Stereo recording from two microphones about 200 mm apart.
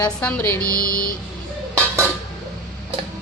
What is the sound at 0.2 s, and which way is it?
Speech, 5° left (ahead or behind).